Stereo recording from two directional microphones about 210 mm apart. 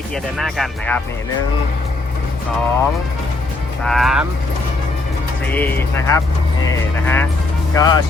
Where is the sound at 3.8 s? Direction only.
Centre (ahead or behind).